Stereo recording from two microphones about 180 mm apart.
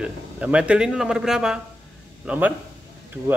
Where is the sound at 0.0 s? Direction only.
5° right (ahead or behind).